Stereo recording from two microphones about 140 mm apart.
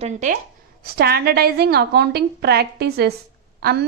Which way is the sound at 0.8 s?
90° right.